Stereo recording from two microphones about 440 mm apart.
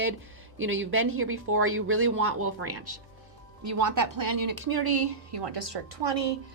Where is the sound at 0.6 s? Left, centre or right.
Right.